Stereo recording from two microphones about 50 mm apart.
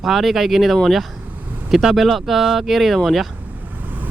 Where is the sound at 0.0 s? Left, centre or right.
Centre.